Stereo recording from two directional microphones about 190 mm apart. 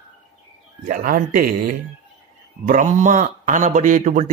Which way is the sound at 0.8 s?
45° right (ahead or behind).